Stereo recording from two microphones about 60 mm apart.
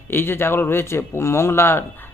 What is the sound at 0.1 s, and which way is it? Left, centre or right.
A man's voice, left.